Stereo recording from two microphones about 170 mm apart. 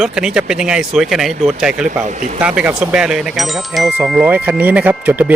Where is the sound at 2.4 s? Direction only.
5° right (ahead or behind).